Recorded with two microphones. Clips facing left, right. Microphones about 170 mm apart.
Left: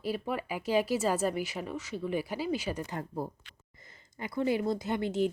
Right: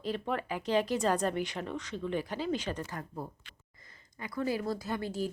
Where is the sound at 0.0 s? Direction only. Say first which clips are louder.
Left 1 dB; 10° left (ahead or behind).